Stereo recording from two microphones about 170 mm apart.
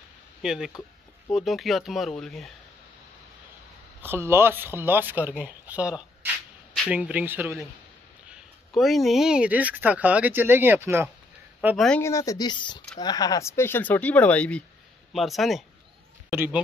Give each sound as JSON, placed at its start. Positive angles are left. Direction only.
{"t": 0.4, "sound": "speech", "side_deg": -5}
{"t": 4.0, "sound": "speech", "side_deg": -15}
{"t": 8.3, "sound": "speech", "side_deg": 0}
{"t": 11.7, "sound": "speech", "side_deg": 0}
{"t": 12.0, "sound": "speech", "side_deg": 20}
{"t": 16.3, "sound": "speech", "side_deg": -10}